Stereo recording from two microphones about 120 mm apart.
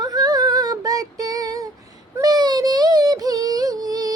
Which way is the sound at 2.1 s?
35° right (ahead or behind).